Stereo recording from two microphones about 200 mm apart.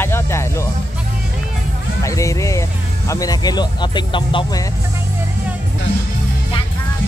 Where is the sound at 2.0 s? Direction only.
15° left (ahead or behind).